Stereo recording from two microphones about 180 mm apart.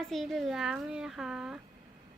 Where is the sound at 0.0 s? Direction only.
Centre (ahead or behind).